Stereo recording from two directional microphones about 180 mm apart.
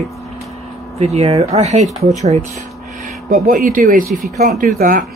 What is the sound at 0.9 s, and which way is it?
Speech, 35° right (ahead or behind).